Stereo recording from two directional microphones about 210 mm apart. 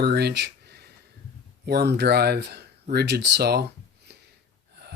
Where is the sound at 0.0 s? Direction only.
50° right (ahead or behind).